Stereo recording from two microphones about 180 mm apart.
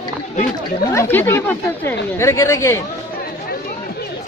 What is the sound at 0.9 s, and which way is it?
Speech, 15° left (ahead or behind).